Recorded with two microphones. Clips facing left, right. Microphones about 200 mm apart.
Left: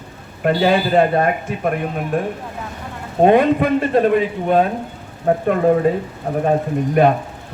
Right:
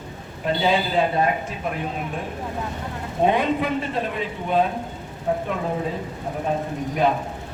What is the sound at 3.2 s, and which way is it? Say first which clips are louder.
Speech: left 8 dB; 55° left (ahead or behind).